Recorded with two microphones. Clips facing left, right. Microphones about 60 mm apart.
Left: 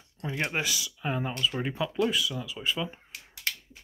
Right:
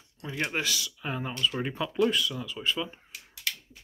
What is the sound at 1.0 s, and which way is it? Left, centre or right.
Speech, centre.